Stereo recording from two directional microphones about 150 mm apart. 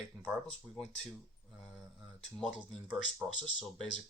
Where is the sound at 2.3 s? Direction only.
Centre (ahead or behind).